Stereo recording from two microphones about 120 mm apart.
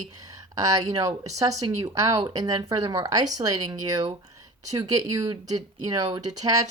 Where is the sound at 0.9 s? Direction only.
30° right (ahead or behind).